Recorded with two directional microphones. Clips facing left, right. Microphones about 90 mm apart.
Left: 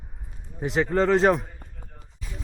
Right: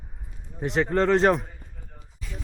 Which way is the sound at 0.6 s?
Centre (ahead or behind).